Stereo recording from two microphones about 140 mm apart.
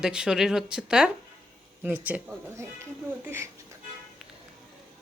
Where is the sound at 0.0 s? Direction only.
5° right (ahead or behind).